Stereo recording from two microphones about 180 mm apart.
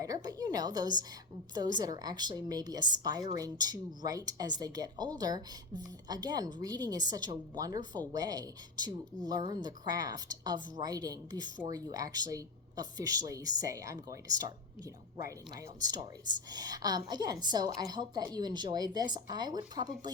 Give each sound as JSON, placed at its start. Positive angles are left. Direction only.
{"t": 0.0, "sound": "speech", "side_deg": -20}